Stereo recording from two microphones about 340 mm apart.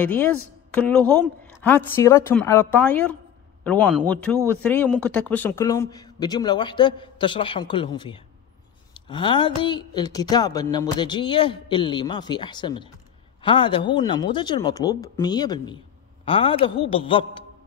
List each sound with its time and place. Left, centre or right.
0.0 s a woman's voice: centre